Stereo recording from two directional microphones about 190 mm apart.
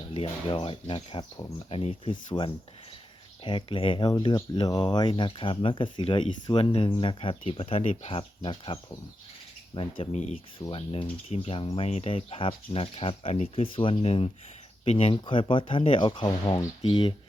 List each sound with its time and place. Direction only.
0.1 s speech: 25° left (ahead or behind)
10.0 s speech: 35° left (ahead or behind)